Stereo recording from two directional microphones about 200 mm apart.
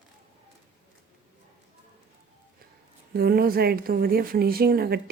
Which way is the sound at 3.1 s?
50° right (ahead or behind).